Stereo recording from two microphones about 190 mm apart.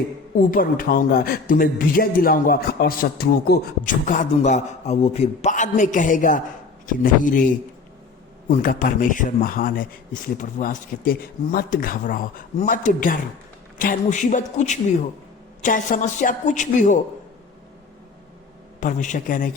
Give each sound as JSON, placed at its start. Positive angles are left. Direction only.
{"t": 0.3, "sound": "a man's voice", "side_deg": 45}
{"t": 8.4, "sound": "a man's voice", "side_deg": 45}
{"t": 18.8, "sound": "a man's voice", "side_deg": 40}